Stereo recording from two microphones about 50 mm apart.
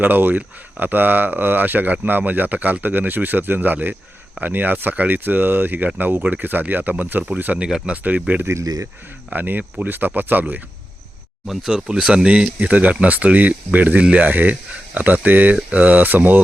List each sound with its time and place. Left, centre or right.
0.0 s speech: right
7.6 s speech: centre
8.4 s speech: right
9.3 s speech: right
11.4 s speech: centre
11.9 s speech: centre
12.3 s speech: right